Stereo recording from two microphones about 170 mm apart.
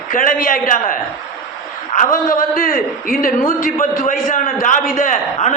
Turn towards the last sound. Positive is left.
turn(degrees=50)  # may be behind; listen again after turning